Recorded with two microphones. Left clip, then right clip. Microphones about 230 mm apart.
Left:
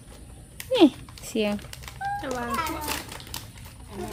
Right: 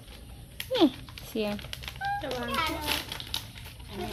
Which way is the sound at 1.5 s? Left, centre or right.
Centre.